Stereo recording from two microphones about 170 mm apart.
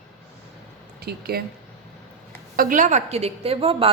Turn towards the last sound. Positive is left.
turn(degrees=-35)  # may be behind; listen again after turning